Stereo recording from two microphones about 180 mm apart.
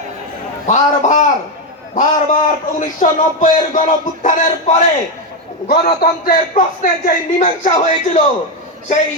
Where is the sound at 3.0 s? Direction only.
40° left (ahead or behind).